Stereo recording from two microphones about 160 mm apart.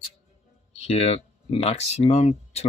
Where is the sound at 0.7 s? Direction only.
40° left (ahead or behind).